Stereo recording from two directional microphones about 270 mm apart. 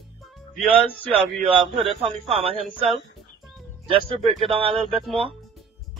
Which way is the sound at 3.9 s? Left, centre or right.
Centre.